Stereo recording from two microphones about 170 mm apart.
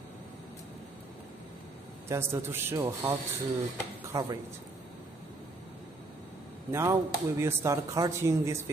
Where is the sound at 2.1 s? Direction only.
15° right (ahead or behind).